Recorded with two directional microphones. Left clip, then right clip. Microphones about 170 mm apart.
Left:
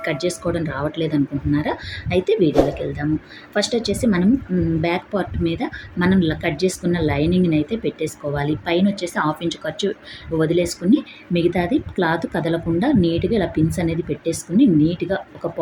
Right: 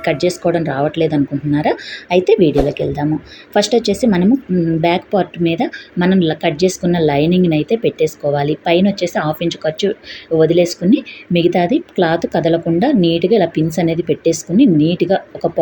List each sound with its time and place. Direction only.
0.0 s speech: 5° right (ahead or behind)
3.5 s speech: 10° right (ahead or behind)